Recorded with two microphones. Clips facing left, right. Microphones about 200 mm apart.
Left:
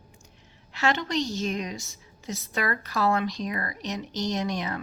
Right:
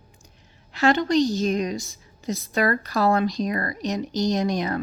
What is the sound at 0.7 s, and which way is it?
A woman's voice, 40° right (ahead or behind).